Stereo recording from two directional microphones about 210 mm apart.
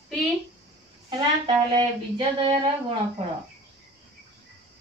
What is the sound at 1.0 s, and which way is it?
Speech, 25° right (ahead or behind).